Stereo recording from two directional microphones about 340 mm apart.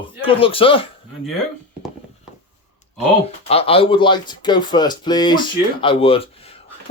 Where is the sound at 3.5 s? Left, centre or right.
Centre.